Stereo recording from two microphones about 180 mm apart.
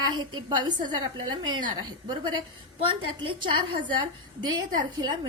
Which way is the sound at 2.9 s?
30° right (ahead or behind).